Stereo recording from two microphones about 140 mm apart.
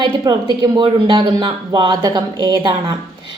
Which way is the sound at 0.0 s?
35° right (ahead or behind).